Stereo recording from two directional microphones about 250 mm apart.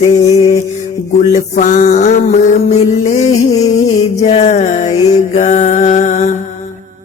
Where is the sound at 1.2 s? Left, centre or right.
Left.